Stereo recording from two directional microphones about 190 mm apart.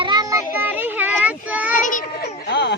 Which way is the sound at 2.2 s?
60° left (ahead or behind).